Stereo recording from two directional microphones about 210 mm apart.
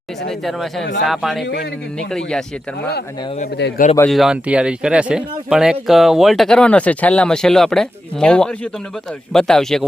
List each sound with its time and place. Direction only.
0.3 s speech: centre (ahead or behind)
3.6 s a man's voice: 50° left (ahead or behind)
4.1 s speech: centre (ahead or behind)